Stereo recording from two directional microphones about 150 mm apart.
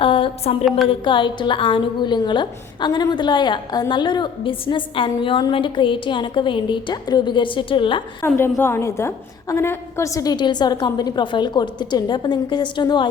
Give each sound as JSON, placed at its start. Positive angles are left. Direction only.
{"t": 0.0, "sound": "a sound", "side_deg": 35}
{"t": 0.9, "sound": "a woman's voice", "side_deg": 35}
{"t": 8.4, "sound": "a woman's voice", "side_deg": 15}